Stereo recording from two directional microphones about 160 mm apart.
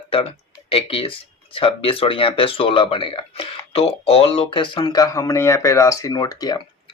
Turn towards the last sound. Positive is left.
turn(degrees=25)  # may be behind; listen again after turning